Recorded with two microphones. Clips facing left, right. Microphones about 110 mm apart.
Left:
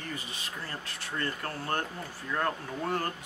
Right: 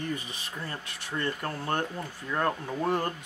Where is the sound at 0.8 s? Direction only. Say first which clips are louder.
Right 3 dB; 20° right (ahead or behind).